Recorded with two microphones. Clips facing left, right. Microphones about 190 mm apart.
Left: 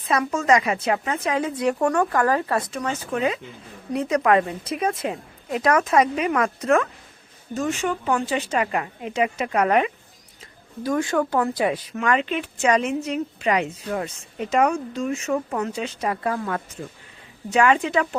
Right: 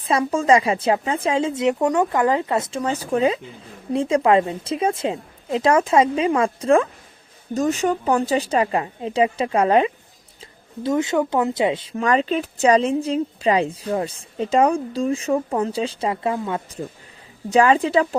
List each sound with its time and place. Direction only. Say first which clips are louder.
0.0 s speech: right 3 dB; 30° right (ahead or behind)
17.5 s speech: right 3 dB; 35° right (ahead or behind)